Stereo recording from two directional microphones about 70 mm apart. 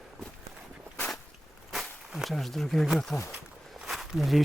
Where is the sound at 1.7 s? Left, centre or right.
Centre.